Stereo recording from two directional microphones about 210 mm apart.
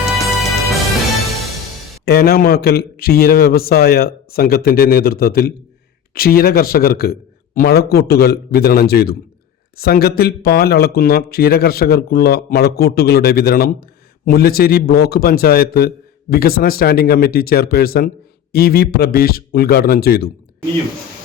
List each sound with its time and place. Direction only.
0.0 s music: centre (ahead or behind)
2.0 s speech: 45° left (ahead or behind)